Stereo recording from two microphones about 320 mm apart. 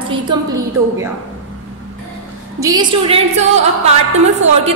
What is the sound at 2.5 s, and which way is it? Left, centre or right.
Speech, centre.